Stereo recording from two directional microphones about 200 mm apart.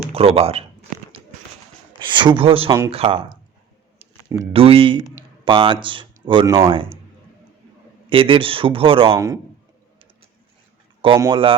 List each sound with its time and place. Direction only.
0.1 s a sound: 30° right (ahead or behind)
2.0 s speech: 25° right (ahead or behind)
4.5 s speech: 30° right (ahead or behind)
8.1 s a man's voice: 25° right (ahead or behind)
11.0 s speech: 25° right (ahead or behind)